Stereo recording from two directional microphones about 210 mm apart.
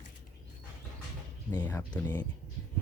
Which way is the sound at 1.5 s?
10° left (ahead or behind).